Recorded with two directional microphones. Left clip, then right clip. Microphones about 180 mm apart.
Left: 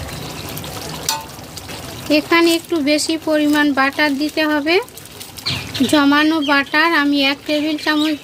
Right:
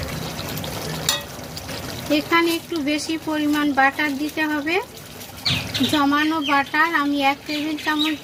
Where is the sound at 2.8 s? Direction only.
60° left (ahead or behind).